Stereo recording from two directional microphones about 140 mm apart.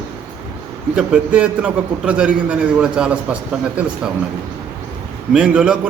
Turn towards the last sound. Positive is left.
turn(degrees=-10)  # may be behind; listen again after turning